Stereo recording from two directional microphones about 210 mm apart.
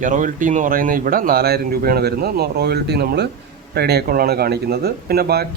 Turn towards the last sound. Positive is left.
turn(degrees=-50)  # may be behind; listen again after turning